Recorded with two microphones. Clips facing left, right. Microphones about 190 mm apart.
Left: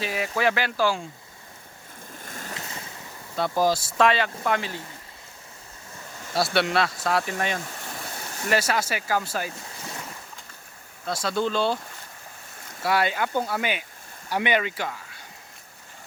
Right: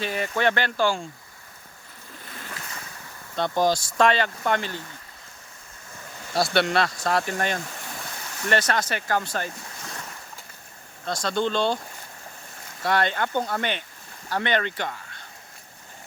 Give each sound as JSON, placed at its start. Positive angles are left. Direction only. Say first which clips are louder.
{"t": 0.0, "sound": "speech", "louder": "right 1 dB", "side_deg": 5}
{"t": 2.2, "sound": "boat", "louder": "left 2 dB", "side_deg": 45}
{"t": 3.3, "sound": "speech", "louder": "even", "side_deg": 5}
{"t": 6.3, "sound": "speech", "louder": "right 1 dB", "side_deg": 0}
{"t": 11.0, "sound": "speech", "louder": "even", "side_deg": 5}
{"t": 12.8, "sound": "speech", "louder": "even", "side_deg": 5}